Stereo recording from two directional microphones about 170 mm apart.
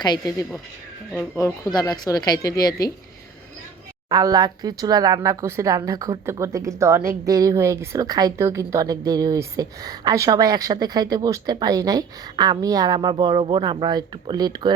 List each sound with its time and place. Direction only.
0.0 s speech: 25° left (ahead or behind)
4.1 s speech: 20° right (ahead or behind)